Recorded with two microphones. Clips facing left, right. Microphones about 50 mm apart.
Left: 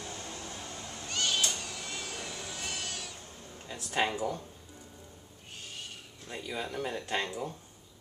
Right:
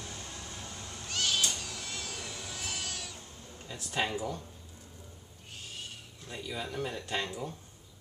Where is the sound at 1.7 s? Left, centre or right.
Centre.